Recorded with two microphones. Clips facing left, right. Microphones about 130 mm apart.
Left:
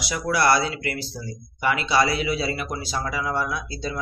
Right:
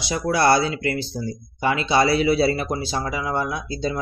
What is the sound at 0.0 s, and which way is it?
Speech, 25° right (ahead or behind).